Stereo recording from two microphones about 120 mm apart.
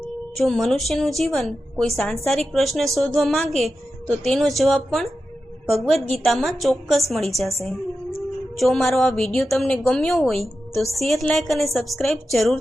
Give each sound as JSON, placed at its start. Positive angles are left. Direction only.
{"t": 0.3, "sound": "a woman's voice", "side_deg": 5}